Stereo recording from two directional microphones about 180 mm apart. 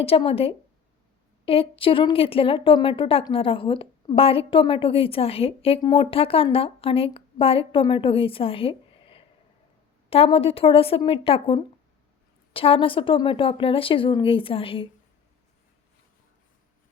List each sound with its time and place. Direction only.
0.0 s a woman's voice: 30° left (ahead or behind)